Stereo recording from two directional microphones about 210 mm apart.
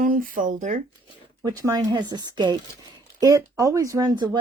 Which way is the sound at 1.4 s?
15° right (ahead or behind).